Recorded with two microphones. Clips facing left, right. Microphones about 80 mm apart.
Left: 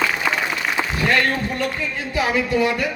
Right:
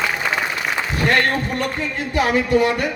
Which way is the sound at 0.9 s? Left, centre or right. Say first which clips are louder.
Right 2 dB; right.